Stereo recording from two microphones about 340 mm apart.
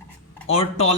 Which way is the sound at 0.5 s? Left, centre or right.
Centre.